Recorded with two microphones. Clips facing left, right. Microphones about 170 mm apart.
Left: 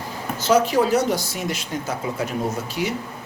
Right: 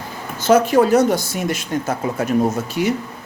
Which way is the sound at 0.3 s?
55° right (ahead or behind).